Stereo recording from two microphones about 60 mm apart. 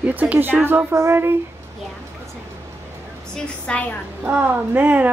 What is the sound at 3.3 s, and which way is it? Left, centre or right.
Speech, centre.